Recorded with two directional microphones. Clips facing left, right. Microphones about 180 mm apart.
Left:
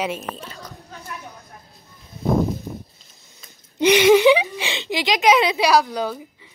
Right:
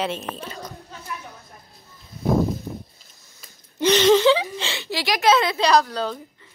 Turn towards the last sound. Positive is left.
turn(degrees=10)  # may be behind; listen again after turning